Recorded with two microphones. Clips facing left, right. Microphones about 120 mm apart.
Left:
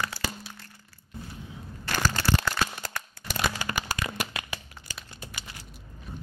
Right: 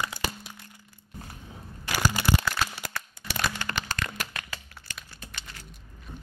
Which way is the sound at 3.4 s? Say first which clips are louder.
Left 1 dB; 10° left (ahead or behind).